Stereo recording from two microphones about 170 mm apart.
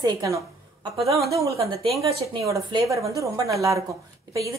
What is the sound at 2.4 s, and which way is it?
A woman's voice, 20° right (ahead or behind).